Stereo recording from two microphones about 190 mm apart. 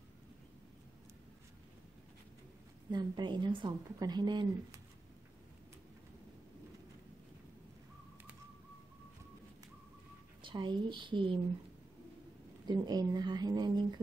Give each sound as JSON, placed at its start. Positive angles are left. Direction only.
{"t": 2.9, "sound": "a woman's voice", "side_deg": -25}
{"t": 10.4, "sound": "a woman's voice", "side_deg": -25}
{"t": 12.6, "sound": "a woman's voice", "side_deg": -20}